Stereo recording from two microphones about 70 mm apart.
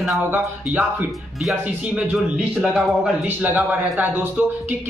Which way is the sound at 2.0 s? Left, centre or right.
Centre.